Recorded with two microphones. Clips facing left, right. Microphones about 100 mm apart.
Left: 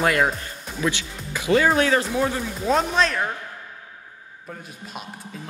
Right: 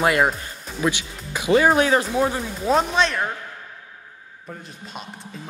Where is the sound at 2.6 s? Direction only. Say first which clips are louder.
Right 1 dB; 5° right (ahead or behind).